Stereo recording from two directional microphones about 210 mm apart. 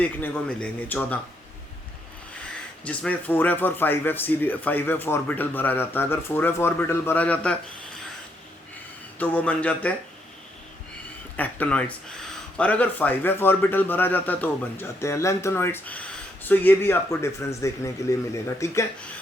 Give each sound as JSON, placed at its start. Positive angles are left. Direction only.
{"t": 0.0, "sound": "speech", "side_deg": 5}
{"t": 2.8, "sound": "speech", "side_deg": 5}
{"t": 9.1, "sound": "speech", "side_deg": 5}
{"t": 11.3, "sound": "speech", "side_deg": 10}